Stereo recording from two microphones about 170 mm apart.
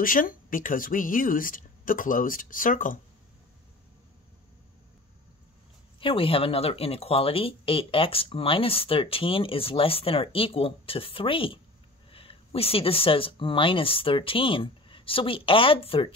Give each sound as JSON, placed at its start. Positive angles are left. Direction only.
{"t": 0.0, "sound": "speech", "side_deg": 55}
{"t": 5.9, "sound": "speech", "side_deg": 30}